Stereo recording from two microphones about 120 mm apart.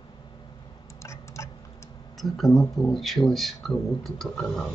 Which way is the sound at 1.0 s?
25° left (ahead or behind).